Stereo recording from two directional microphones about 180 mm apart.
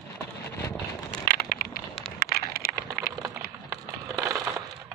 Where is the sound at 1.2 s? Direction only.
55° left (ahead or behind).